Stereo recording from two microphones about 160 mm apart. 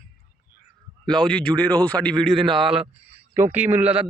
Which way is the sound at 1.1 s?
5° left (ahead or behind).